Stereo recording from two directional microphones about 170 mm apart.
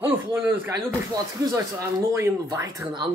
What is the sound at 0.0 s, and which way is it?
Speech, 10° right (ahead or behind).